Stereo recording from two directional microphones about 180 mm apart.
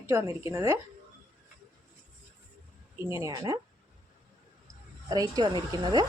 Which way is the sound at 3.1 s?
15° right (ahead or behind).